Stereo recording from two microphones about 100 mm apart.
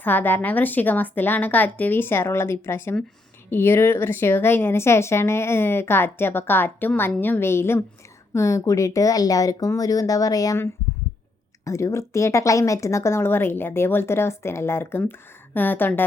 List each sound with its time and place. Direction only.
0.0 s speech: 20° left (ahead or behind); by 10.6 s 35° left (ahead or behind)
11.6 s speech: 30° left (ahead or behind)